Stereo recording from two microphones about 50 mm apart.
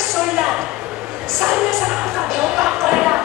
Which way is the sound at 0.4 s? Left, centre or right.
Centre.